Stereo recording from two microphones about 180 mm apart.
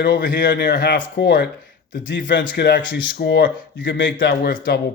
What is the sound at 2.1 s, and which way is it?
Speech, 85° left.